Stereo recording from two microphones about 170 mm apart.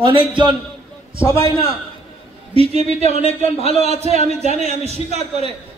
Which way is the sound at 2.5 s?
35° left (ahead or behind).